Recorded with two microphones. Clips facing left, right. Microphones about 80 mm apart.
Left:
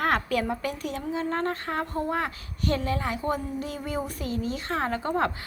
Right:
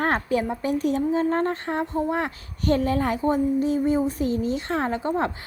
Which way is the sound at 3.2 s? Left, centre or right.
Right.